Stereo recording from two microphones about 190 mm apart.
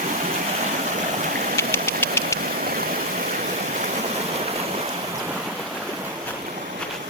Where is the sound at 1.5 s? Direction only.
15° left (ahead or behind).